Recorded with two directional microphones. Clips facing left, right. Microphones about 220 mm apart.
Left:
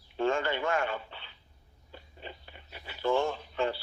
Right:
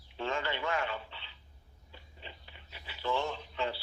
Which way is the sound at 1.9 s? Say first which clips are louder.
Left 6 dB; 50° left (ahead or behind).